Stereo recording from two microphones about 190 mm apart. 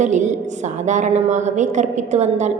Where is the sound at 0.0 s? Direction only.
40° right (ahead or behind).